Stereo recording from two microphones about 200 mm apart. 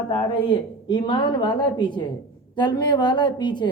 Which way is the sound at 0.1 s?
25° left (ahead or behind).